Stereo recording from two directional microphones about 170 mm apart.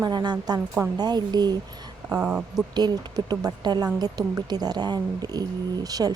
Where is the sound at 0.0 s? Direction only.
25° right (ahead or behind).